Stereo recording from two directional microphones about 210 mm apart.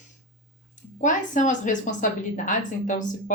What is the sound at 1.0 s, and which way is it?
A woman's voice, 35° left (ahead or behind).